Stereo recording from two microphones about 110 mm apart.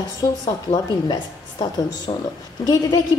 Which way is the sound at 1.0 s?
45° left (ahead or behind).